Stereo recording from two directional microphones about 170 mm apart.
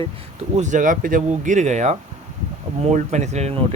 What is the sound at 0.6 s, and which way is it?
Speech, 50° right (ahead or behind).